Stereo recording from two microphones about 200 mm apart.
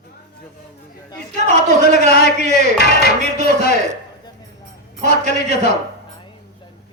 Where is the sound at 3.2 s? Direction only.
35° right (ahead or behind).